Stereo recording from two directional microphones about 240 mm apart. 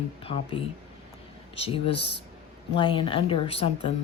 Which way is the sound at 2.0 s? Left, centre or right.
Left.